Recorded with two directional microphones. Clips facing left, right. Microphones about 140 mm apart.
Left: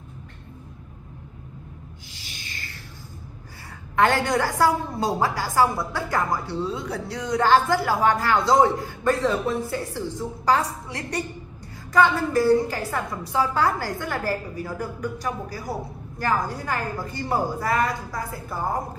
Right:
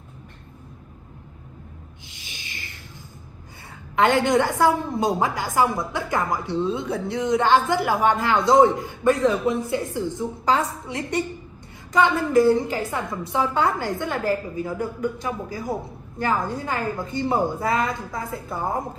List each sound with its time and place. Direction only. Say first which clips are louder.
2.0 s owl: left 1 dB; 20° right (ahead or behind)
3.9 s a woman's voice: right 2 dB; 20° right (ahead or behind)